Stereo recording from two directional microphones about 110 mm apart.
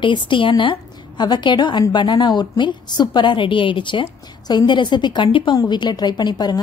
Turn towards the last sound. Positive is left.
turn(degrees=40)  # may be behind; listen again after turning